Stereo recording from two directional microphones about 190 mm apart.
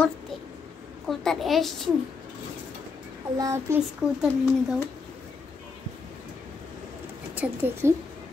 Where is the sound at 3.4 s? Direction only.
15° right (ahead or behind).